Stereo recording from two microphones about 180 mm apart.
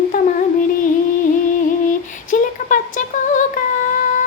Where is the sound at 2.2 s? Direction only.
45° left (ahead or behind).